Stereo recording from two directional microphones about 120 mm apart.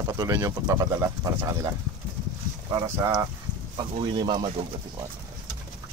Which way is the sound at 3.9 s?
45° right (ahead or behind).